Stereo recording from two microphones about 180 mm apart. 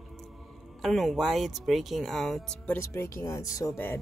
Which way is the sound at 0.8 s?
Centre (ahead or behind).